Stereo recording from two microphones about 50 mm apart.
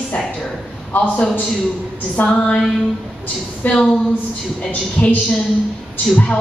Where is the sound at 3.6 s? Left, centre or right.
Left.